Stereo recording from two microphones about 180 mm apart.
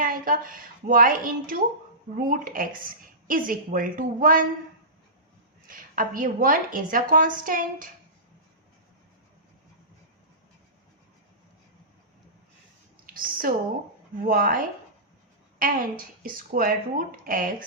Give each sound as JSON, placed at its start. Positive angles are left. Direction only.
{"t": 0.0, "sound": "a woman's voice", "side_deg": -50}
{"t": 5.6, "sound": "a woman's voice", "side_deg": -50}
{"t": 13.1, "sound": "a woman's voice", "side_deg": -50}